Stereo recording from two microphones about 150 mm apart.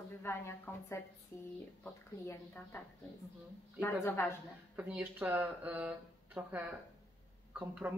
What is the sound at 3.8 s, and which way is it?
Speech, 15° left (ahead or behind).